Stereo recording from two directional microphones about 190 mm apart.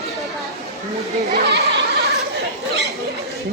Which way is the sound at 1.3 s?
60° right (ahead or behind).